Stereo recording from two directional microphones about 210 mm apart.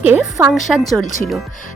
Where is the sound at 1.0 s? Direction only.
40° left (ahead or behind).